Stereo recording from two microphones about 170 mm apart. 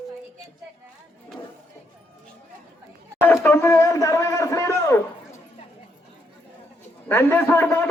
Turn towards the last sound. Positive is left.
turn(degrees=10)  # may be behind; listen again after turning